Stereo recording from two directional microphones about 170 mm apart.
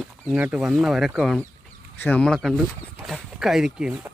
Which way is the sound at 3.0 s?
Centre (ahead or behind).